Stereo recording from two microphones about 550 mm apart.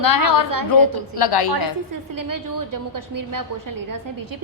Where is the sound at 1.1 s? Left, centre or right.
Left.